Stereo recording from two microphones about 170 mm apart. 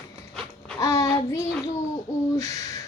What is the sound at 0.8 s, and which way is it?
Child singing, 20° left (ahead or behind).